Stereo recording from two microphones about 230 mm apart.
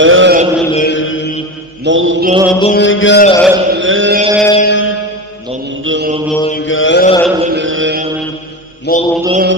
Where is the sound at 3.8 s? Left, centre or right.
Right.